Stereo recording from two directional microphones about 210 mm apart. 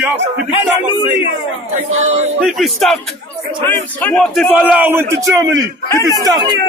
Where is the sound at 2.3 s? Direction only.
Centre (ahead or behind); by 6.4 s 20° right (ahead or behind).